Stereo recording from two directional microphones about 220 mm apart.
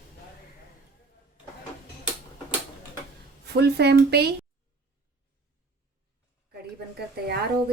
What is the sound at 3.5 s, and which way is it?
Speech, 50° right (ahead or behind).